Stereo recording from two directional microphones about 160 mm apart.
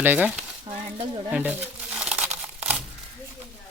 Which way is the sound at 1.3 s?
10° right (ahead or behind).